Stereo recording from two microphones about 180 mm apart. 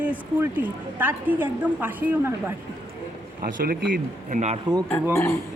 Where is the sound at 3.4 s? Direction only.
55° right (ahead or behind).